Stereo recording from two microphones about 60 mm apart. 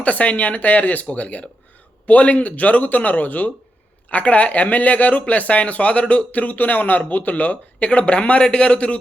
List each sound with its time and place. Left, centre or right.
0.0 s speech: left